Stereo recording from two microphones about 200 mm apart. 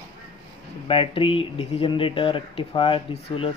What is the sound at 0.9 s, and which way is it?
Speech, 25° left (ahead or behind).